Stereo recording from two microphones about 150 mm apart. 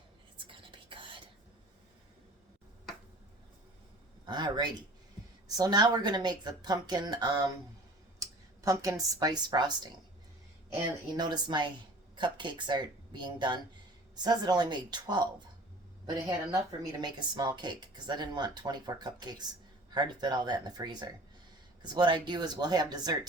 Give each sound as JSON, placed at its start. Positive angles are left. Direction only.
{"t": 0.3, "sound": "whispering", "side_deg": -35}
{"t": 4.3, "sound": "a woman's voice", "side_deg": -30}
{"t": 11.2, "sound": "a woman's voice", "side_deg": -30}